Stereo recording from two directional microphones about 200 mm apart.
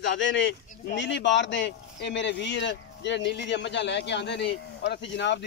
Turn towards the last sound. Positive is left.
turn(degrees=60)  # may be behind; listen again after turning